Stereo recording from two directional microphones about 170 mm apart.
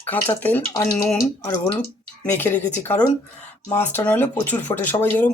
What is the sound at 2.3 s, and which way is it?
Speech, 10° left (ahead or behind).